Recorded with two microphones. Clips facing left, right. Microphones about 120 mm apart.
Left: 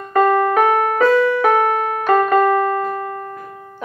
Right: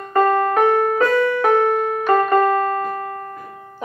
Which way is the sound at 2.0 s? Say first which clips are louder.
Left 2 dB; 10° left (ahead or behind).